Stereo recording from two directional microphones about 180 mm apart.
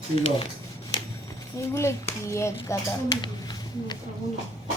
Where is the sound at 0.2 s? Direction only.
35° left (ahead or behind).